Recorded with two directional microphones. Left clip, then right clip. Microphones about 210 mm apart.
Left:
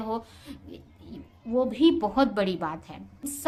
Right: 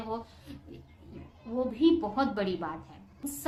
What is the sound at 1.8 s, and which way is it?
A woman's voice, 35° left (ahead or behind).